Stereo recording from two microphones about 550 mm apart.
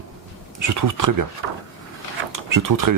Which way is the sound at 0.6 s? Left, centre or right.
Right.